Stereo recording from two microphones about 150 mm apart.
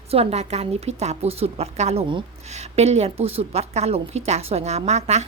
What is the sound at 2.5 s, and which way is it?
A woman's voice, 45° right (ahead or behind).